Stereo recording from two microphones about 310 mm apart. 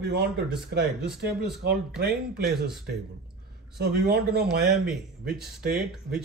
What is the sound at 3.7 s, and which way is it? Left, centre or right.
Speech, right.